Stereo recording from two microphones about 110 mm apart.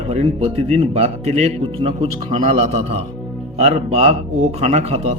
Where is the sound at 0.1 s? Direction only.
75° right (ahead or behind).